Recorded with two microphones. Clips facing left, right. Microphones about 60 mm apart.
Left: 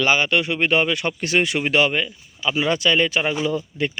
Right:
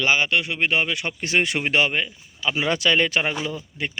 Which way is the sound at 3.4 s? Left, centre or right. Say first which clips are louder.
Left 6 dB; centre.